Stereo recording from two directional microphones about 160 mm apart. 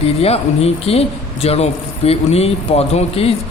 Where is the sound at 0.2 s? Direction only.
40° left (ahead or behind).